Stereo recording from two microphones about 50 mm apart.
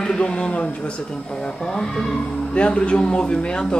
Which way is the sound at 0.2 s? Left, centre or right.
Left.